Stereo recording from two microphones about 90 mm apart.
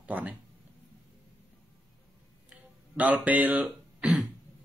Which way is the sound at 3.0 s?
15° right (ahead or behind).